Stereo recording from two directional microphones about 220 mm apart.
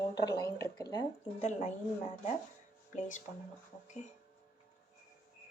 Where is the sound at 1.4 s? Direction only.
30° left (ahead or behind).